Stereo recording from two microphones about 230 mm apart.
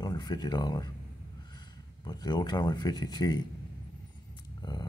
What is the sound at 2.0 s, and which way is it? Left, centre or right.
Speech, centre.